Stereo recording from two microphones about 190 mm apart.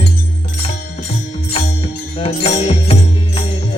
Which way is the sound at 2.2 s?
35° left (ahead or behind).